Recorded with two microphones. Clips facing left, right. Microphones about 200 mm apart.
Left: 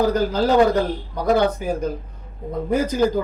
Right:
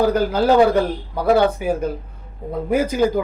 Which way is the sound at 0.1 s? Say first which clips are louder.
Right 2 dB; 10° right (ahead or behind).